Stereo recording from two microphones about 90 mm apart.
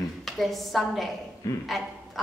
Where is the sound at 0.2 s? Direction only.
Centre (ahead or behind).